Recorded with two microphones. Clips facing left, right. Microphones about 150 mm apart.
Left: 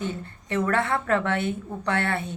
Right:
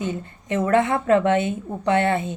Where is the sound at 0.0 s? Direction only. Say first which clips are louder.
Right 4 dB; 15° right (ahead or behind).